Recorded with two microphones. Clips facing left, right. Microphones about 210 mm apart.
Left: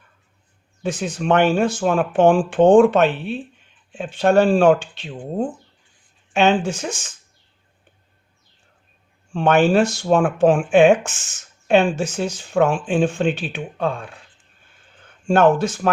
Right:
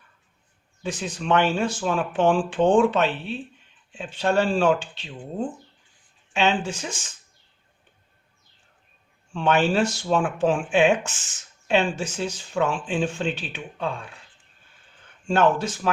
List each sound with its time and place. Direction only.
0.8 s speech: 50° left (ahead or behind)
9.3 s speech: 50° left (ahead or behind)
15.3 s speech: 50° left (ahead or behind)